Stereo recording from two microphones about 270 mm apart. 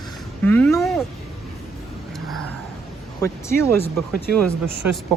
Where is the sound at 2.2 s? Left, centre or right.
Centre.